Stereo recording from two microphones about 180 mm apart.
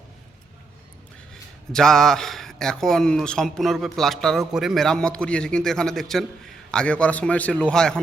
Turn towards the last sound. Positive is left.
turn(degrees=5)  # may be behind; listen again after turning